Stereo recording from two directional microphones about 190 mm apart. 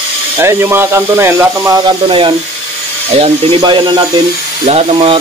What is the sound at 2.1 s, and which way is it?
Speech, 25° right (ahead or behind).